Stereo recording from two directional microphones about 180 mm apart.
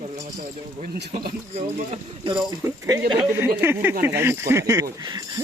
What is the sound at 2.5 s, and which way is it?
Speech, 20° right (ahead or behind).